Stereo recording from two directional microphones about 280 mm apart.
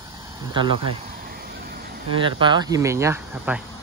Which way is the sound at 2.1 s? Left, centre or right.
Centre.